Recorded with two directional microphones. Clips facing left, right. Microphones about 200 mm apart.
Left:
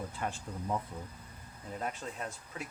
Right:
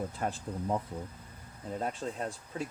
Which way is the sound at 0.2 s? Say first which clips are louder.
Right 3 dB; 35° right (ahead or behind).